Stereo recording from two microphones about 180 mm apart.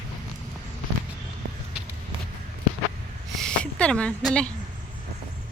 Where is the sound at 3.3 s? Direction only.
Centre (ahead or behind).